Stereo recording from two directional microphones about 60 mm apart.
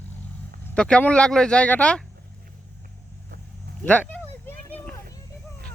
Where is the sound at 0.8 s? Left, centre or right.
Centre.